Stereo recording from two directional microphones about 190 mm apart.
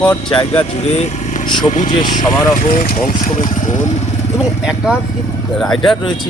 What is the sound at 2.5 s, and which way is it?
Speech, 50° left (ahead or behind).